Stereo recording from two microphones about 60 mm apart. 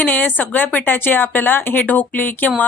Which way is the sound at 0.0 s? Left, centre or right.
Left.